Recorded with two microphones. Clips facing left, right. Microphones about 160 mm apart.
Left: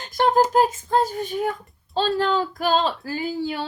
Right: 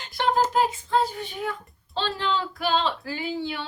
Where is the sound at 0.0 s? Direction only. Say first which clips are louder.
Left 5 dB; 45° left (ahead or behind).